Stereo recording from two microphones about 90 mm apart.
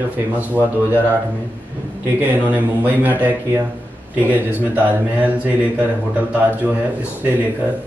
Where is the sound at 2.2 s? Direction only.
20° right (ahead or behind).